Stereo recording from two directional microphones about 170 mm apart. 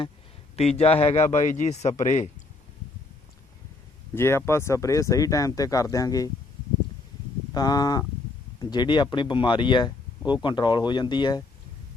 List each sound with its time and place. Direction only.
0.8 s a man's voice: 35° left (ahead or behind)
4.1 s speech: 15° left (ahead or behind)
7.5 s speech: 25° left (ahead or behind)